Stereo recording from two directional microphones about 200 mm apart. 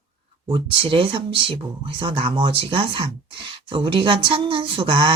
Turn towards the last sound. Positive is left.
turn(degrees=-25)  # may be behind; listen again after turning